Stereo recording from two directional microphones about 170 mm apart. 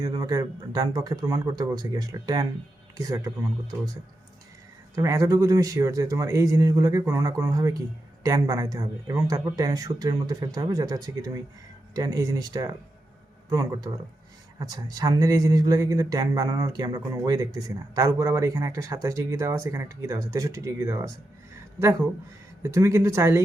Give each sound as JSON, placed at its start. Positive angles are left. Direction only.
{"t": 0.0, "sound": "speech", "side_deg": -20}
{"t": 4.9, "sound": "speech", "side_deg": -20}
{"t": 22.6, "sound": "speech", "side_deg": -15}